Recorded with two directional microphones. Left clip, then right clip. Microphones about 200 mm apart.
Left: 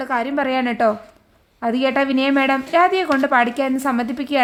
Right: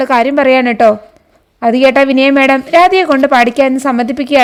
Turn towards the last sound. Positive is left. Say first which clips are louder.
# right 9 dB
turn(degrees=-30)  # may be behind; listen again after turning